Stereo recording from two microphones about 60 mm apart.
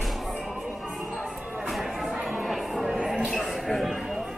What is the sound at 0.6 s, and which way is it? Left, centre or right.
Music, centre.